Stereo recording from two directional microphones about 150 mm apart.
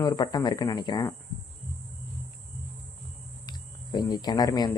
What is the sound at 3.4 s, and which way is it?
Cricket, 25° left (ahead or behind).